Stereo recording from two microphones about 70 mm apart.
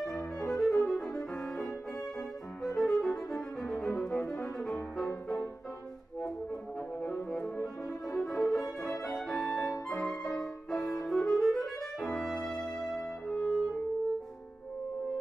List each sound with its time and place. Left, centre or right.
0.0 s music: centre
1.6 s music: left
2.1 s music: centre
7.0 s music: centre
9.6 s music: left
10.3 s music: centre